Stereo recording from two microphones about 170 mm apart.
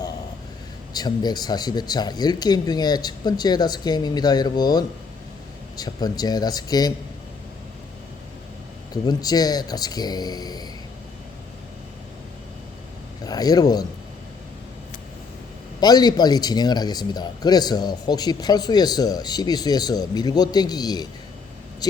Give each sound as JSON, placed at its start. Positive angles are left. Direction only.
{"t": 0.9, "sound": "speech", "side_deg": 25}
{"t": 9.0, "sound": "speech", "side_deg": 20}
{"t": 13.2, "sound": "speech", "side_deg": 20}
{"t": 15.8, "sound": "speech", "side_deg": 25}